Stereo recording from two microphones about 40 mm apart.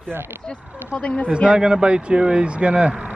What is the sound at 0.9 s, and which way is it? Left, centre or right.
Speech, left.